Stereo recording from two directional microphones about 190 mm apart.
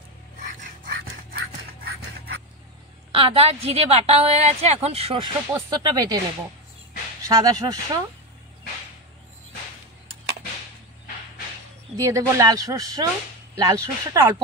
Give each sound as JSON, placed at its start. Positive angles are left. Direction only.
{"t": 1.9, "sound": "a sound", "side_deg": -55}
{"t": 3.1, "sound": "a woman's voice", "side_deg": -30}
{"t": 7.2, "sound": "speech", "side_deg": -15}
{"t": 12.0, "sound": "speech", "side_deg": -15}